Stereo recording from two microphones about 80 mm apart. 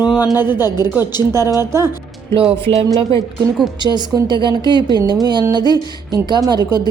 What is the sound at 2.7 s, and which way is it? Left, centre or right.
A woman's voice, right.